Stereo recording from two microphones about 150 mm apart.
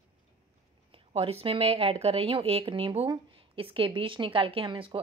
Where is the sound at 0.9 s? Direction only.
40° right (ahead or behind).